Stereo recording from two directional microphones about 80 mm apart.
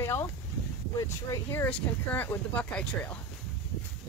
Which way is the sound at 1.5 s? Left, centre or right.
Left.